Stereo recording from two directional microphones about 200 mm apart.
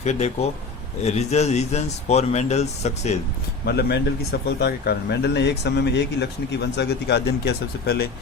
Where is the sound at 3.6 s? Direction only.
55° left (ahead or behind).